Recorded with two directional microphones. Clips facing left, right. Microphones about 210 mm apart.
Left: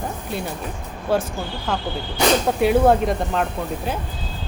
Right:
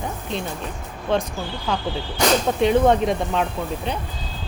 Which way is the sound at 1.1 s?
5° left (ahead or behind).